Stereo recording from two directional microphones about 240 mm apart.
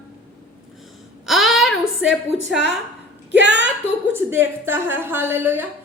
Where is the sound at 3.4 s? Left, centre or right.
Right.